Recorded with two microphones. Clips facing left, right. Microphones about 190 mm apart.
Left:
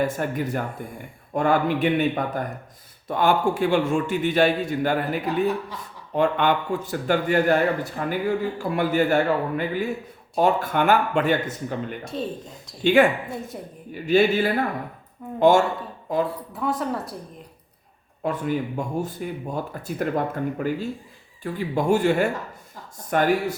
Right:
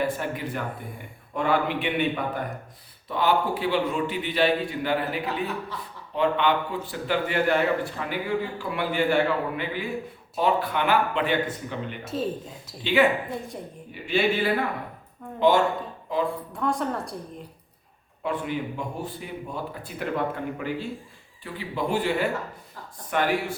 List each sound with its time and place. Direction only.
0.0 s speech: 45° left (ahead or behind)
12.0 s speech: centre (ahead or behind)
12.8 s speech: 50° left (ahead or behind)
13.5 s speech: 5° left (ahead or behind)
13.9 s speech: 45° left (ahead or behind)
16.5 s speech: 5° left (ahead or behind)
18.2 s speech: 40° left (ahead or behind)